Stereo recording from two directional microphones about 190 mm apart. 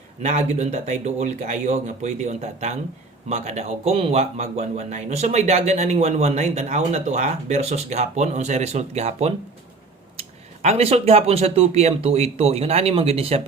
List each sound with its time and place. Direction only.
0.2 s speech: 35° right (ahead or behind)
10.6 s speech: 30° right (ahead or behind)